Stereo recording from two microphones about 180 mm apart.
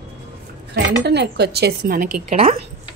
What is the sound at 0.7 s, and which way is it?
Speech, 70° right (ahead or behind).